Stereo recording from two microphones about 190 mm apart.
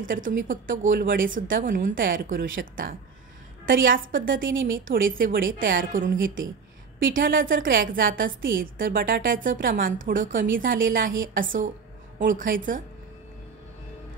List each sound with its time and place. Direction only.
0.0 s a woman's voice: 45° right (ahead or behind)